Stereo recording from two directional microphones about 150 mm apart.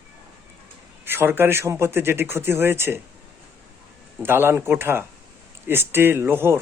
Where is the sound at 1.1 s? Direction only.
15° right (ahead or behind).